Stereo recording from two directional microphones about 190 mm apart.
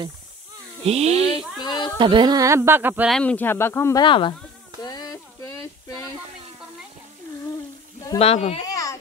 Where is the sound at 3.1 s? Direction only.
5° left (ahead or behind).